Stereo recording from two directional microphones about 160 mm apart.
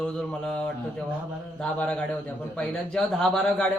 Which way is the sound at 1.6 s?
5° left (ahead or behind).